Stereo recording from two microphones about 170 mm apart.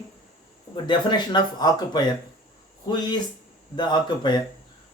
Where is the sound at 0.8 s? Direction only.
25° left (ahead or behind).